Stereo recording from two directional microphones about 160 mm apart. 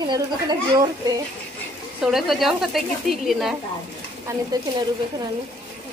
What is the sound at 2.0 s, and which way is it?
A woman's voice, centre (ahead or behind).